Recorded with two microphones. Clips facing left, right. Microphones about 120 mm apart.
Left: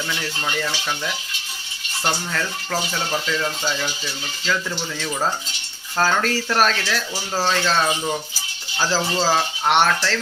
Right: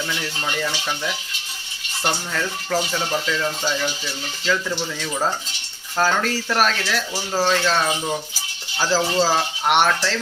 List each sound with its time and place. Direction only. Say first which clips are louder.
0.2 s speech: even; 5° right (ahead or behind)
2.3 s speech: right 2 dB; centre (ahead or behind)
6.0 s speech: even; 5° right (ahead or behind)